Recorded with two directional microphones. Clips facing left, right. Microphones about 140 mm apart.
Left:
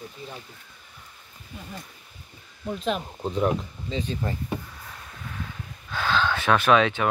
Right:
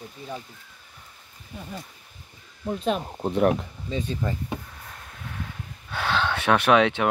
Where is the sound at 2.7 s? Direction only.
35° right (ahead or behind).